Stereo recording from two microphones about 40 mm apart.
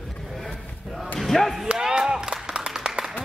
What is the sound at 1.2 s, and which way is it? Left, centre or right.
Basketball bounce, centre.